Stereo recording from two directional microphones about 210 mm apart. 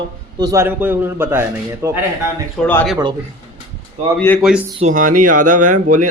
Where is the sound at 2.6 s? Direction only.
5° left (ahead or behind).